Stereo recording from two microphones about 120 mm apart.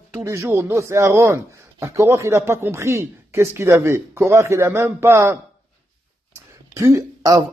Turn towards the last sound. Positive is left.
turn(degrees=-25)  # may be behind; listen again after turning